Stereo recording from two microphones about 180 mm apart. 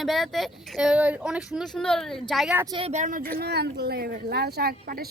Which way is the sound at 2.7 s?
35° right (ahead or behind).